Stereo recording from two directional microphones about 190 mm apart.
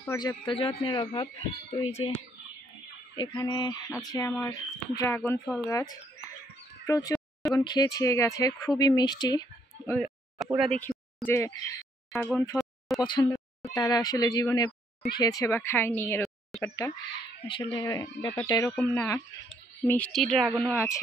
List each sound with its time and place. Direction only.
0.2 s speech: 20° left (ahead or behind)
9.9 s a sound: centre (ahead or behind)
10.6 s speech: 5° left (ahead or behind)
12.5 s a sound: centre (ahead or behind)
13.0 s speech: 20° left (ahead or behind); by 16.6 s 5° left (ahead or behind)
16.6 s speech: 15° left (ahead or behind); by 20.8 s 5° right (ahead or behind)